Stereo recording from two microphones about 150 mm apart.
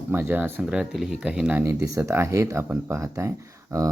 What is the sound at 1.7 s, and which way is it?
Speech, 20° right (ahead or behind).